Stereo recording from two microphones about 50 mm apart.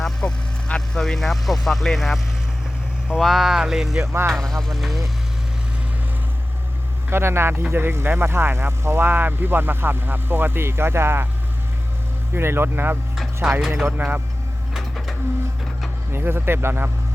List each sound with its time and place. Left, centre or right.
0.2 s speech: centre
4.0 s speech: right
4.3 s speech: centre
7.1 s speech: right
9.0 s speech: right
12.3 s speech: right
13.4 s speech: right
13.8 s speech: right
14.7 s printer: centre
16.1 s speech: right